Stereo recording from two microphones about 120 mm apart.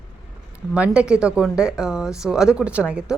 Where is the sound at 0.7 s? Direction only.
10° right (ahead or behind).